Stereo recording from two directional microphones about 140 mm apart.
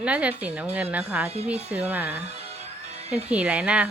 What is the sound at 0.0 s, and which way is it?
Speech, 10° right (ahead or behind).